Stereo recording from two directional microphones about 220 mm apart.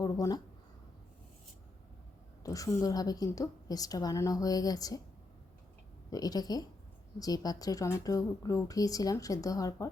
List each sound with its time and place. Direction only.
0.0 s speech: 15° left (ahead or behind)
2.4 s speech: 15° left (ahead or behind)
6.1 s speech: 15° left (ahead or behind)